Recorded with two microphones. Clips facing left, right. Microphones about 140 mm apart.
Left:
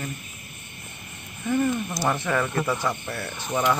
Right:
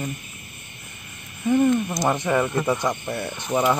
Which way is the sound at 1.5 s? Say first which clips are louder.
Right 5 dB; 20° right (ahead or behind).